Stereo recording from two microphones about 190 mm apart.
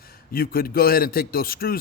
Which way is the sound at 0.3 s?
50° left (ahead or behind).